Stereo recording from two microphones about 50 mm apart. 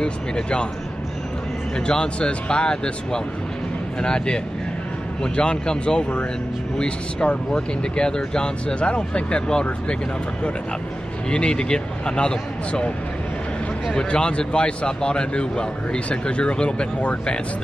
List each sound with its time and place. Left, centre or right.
0.0 s speech: centre
1.9 s speech: centre
11.2 s speech: centre
13.9 s speech: centre